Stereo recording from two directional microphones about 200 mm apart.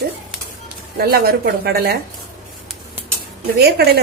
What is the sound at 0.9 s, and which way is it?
A woman's voice, 50° right (ahead or behind).